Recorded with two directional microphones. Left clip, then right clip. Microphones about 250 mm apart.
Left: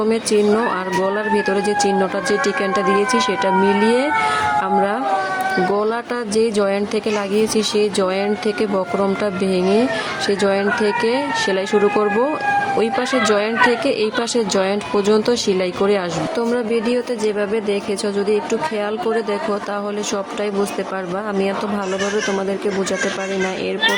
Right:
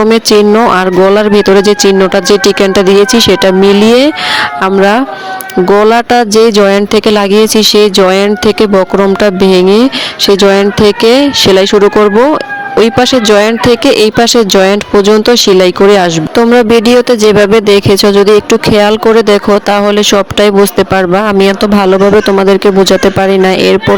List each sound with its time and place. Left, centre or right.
0.1 s speech: right